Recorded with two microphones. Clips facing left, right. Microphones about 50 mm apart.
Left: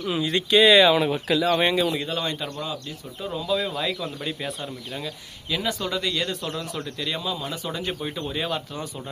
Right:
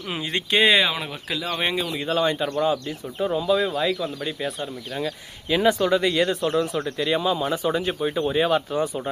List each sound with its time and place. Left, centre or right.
0.1 s speech: right
0.8 s speech: centre
3.8 s speech: centre
5.5 s speech: right